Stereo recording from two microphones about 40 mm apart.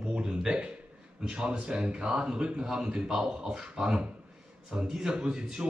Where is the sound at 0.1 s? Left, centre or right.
Right.